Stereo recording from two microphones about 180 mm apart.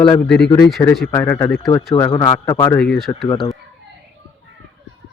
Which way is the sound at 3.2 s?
30° left (ahead or behind).